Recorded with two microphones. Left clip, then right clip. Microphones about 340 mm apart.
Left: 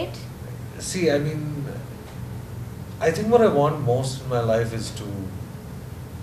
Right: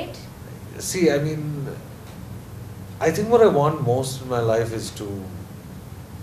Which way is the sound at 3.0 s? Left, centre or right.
Right.